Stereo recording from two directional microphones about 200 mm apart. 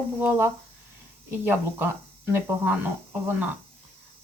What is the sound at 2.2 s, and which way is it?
Speech, 10° right (ahead or behind).